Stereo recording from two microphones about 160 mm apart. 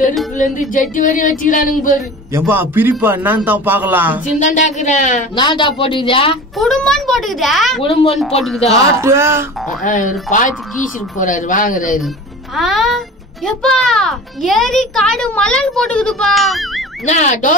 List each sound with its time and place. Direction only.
0.4 s speech: 55° left (ahead or behind)
2.3 s a man's voice: 15° right (ahead or behind)
4.4 s speech: 50° left (ahead or behind)
5.3 s speech: 30° left (ahead or behind)
6.5 s a child's voice: centre (ahead or behind)
7.8 s speech: 35° left (ahead or behind)
9.0 s a man's voice: 15° right (ahead or behind)
9.8 s speech: 55° left (ahead or behind)
11.1 s speech: 55° left (ahead or behind)
12.5 s a child's voice: centre (ahead or behind)
17.0 s speech: 45° left (ahead or behind)